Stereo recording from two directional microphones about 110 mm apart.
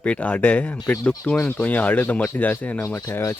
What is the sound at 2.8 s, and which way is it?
Speech, 25° left (ahead or behind).